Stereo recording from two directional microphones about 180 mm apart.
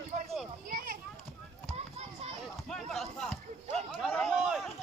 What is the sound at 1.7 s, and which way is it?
Children playing, 35° right (ahead or behind).